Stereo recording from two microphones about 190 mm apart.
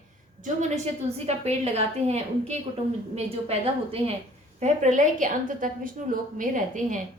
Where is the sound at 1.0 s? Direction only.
35° right (ahead or behind).